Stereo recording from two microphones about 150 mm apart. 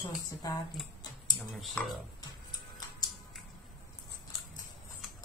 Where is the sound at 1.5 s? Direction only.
Centre (ahead or behind).